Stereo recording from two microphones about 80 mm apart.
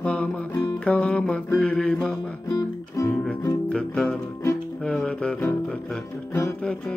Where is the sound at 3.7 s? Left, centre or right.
Centre.